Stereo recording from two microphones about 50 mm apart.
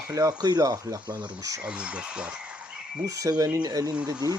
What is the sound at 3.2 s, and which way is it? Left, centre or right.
Speech, right.